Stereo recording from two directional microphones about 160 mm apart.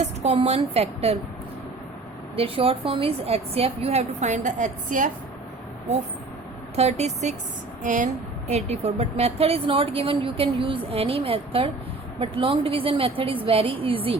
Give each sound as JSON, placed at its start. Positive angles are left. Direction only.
{"t": 0.0, "sound": "a woman's voice", "side_deg": -45}
{"t": 2.3, "sound": "a woman's voice", "side_deg": -35}
{"t": 6.7, "sound": "a woman's voice", "side_deg": -45}